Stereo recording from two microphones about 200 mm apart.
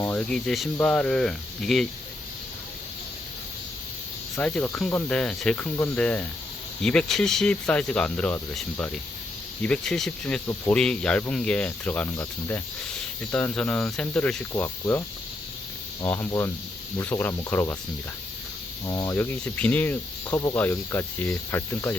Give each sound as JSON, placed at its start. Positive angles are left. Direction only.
{"t": 0.0, "sound": "speech", "side_deg": 5}
{"t": 4.4, "sound": "speech", "side_deg": 5}
{"t": 16.0, "sound": "speech", "side_deg": 15}
{"t": 18.9, "sound": "speech", "side_deg": 15}